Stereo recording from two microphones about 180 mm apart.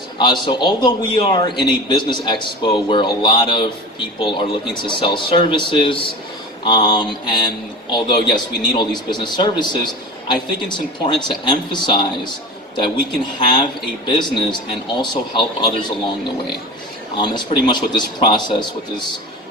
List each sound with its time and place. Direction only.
0.2 s a man's voice: 25° left (ahead or behind)
13.4 s a man's voice: 25° left (ahead or behind)
17.2 s a man's voice: 25° left (ahead or behind)